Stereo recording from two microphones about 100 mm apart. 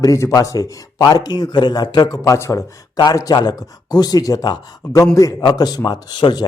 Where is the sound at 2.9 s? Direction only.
40° left (ahead or behind).